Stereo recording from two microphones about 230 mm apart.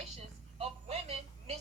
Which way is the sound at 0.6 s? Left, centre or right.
Right.